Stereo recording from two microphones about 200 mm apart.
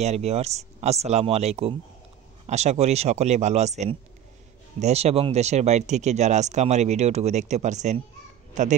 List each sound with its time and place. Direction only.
0.0 s speech: 35° right (ahead or behind)